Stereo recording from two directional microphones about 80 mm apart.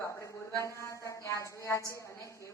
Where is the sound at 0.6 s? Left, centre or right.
Left.